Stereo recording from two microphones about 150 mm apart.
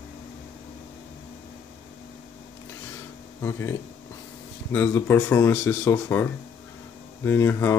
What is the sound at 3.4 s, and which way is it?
Speech, 20° left (ahead or behind).